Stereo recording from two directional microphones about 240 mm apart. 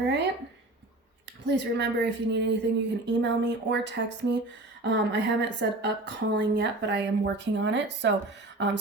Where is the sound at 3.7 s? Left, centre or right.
Right.